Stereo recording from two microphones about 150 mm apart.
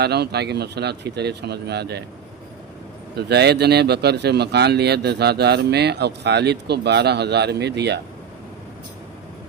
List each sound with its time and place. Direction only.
0.0 s speech: 90° right
3.2 s speech: 90° right